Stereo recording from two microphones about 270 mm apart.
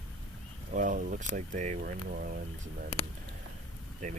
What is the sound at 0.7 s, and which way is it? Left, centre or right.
Speech, right.